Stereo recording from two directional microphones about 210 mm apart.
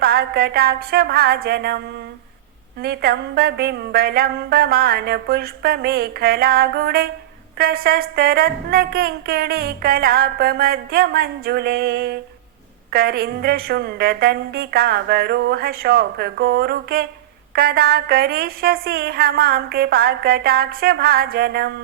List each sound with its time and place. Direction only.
0.0 s speech: 45° right (ahead or behind)
2.8 s speech: 50° right (ahead or behind)